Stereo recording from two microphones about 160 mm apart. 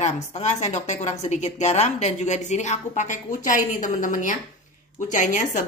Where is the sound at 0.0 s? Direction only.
45° left (ahead or behind).